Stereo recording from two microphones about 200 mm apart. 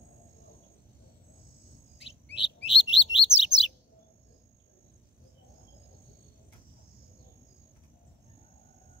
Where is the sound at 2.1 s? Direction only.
30° left (ahead or behind).